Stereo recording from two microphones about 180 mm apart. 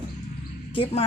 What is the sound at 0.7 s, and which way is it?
Speech, 30° left (ahead or behind).